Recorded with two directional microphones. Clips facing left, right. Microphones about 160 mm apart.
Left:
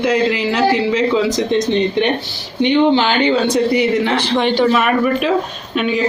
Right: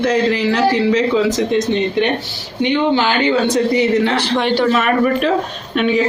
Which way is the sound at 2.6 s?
20° left (ahead or behind).